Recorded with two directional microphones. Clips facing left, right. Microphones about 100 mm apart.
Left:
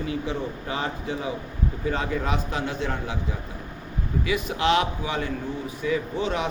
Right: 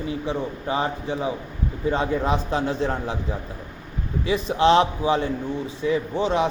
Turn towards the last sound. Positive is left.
turn(degrees=-30)  # may be behind; listen again after turning